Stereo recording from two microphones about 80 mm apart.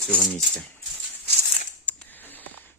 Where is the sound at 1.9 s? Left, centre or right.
Left.